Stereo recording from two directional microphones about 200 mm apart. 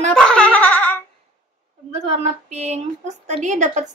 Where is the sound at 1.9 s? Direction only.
35° right (ahead or behind).